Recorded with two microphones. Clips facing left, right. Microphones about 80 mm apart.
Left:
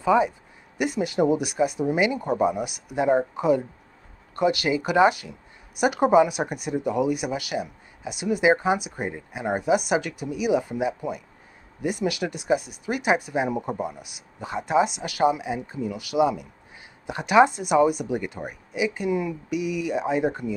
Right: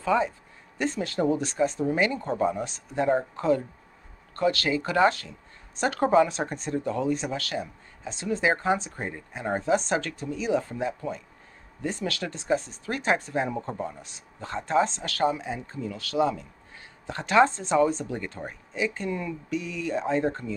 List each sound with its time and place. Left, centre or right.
0.0 s speech: centre